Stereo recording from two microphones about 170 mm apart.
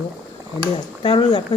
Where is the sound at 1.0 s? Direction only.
30° left (ahead or behind).